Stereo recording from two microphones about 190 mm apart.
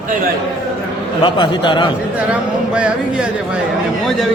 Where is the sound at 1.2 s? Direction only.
25° left (ahead or behind).